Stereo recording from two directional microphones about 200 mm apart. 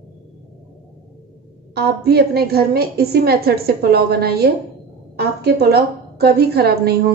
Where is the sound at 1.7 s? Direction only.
50° right (ahead or behind).